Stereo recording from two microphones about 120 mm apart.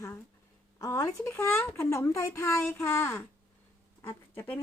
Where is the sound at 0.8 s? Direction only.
25° left (ahead or behind).